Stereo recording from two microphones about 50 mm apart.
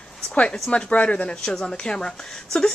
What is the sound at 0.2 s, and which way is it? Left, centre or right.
Speech, centre.